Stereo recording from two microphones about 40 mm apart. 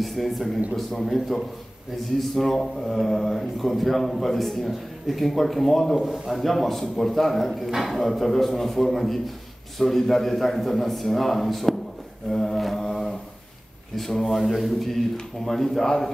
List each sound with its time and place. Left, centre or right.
0.0 s speech: centre
12.3 s a sound: centre
13.9 s speech: centre